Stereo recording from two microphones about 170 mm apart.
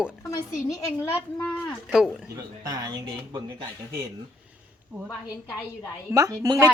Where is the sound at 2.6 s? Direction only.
20° right (ahead or behind).